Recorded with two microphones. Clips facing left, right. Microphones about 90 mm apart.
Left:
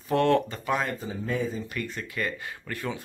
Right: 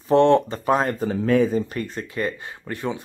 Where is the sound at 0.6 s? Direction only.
40° right (ahead or behind).